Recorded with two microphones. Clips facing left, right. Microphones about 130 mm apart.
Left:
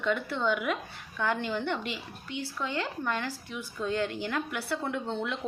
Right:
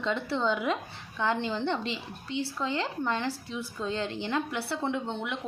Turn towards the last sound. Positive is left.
turn(degrees=-20)  # may be behind; listen again after turning